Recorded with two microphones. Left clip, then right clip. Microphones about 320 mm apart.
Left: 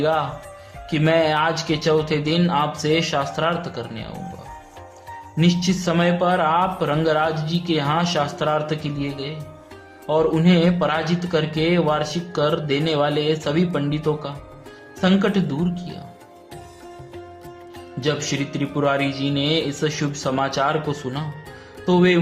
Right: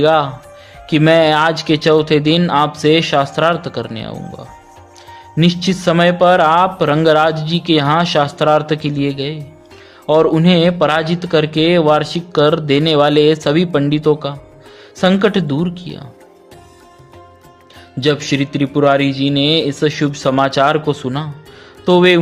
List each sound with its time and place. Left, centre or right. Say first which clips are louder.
0.0 s speech: right 8 dB; right
5.4 s speech: right 6 dB; right
18.0 s speech: right 8 dB; right